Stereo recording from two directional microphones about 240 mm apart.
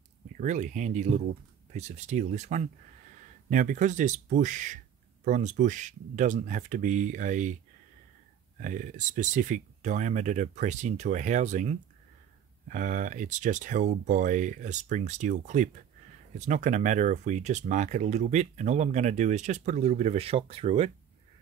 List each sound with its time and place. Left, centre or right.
0.4 s speech: right
8.5 s speech: right